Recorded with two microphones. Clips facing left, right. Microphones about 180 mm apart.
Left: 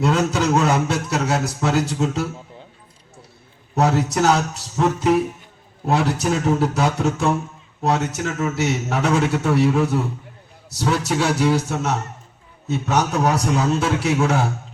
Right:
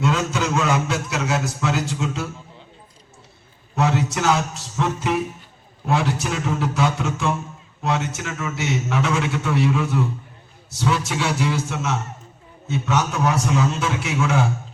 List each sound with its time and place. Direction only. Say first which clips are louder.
0.0 s a man's voice: left 3 dB; 35° left (ahead or behind)
3.8 s a man's voice: left 3 dB; 40° left (ahead or behind)